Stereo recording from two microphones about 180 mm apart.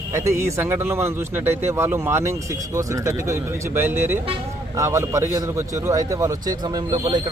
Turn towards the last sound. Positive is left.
turn(degrees=-25)  # may be behind; listen again after turning